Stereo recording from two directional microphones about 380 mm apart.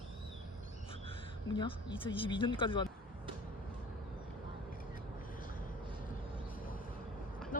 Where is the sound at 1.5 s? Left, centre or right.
Centre.